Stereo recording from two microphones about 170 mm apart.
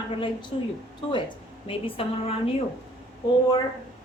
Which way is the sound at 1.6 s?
35° left (ahead or behind).